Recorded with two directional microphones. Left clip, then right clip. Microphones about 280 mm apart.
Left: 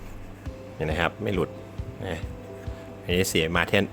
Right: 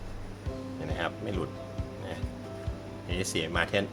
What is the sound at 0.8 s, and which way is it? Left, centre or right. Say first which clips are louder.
Speech: left 8 dB; left.